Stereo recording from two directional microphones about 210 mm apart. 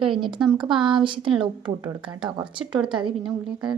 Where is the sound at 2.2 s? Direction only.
20° right (ahead or behind).